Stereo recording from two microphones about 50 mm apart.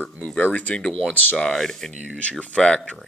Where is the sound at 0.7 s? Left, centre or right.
Centre.